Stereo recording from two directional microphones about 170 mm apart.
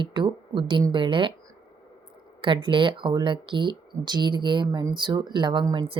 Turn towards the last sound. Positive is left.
turn(degrees=-30)  # may be behind; listen again after turning